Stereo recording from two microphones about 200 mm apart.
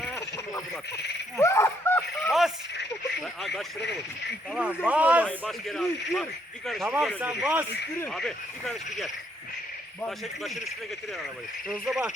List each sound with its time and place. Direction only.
1.4 s speech: 15° left (ahead or behind)
3.8 s speech: 60° left (ahead or behind)
4.5 s a man's voice: 5° right (ahead or behind)
11.7 s a man's voice: centre (ahead or behind)